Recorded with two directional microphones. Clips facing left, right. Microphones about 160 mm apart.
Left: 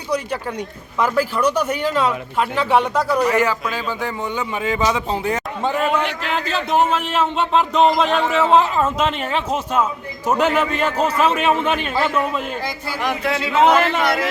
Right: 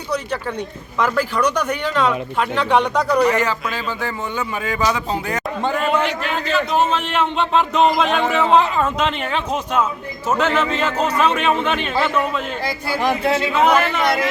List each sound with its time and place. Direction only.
0.9 s speech: 10° left (ahead or behind); by 5.4 s 25° left (ahead or behind)
5.6 s a man's voice: centre (ahead or behind)
13.0 s a man's voice: 30° right (ahead or behind)
13.5 s a man's voice: 25° left (ahead or behind)